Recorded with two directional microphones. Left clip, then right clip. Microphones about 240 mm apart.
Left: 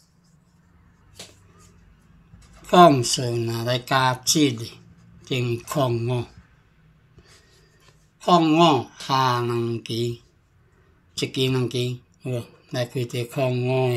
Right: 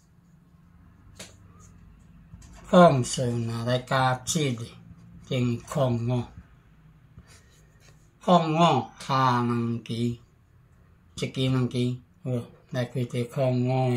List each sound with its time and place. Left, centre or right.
2.7 s speech: left
8.2 s speech: left
11.1 s speech: left